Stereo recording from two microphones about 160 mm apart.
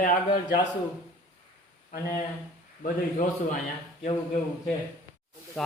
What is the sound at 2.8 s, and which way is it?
Speech, 55° left (ahead or behind).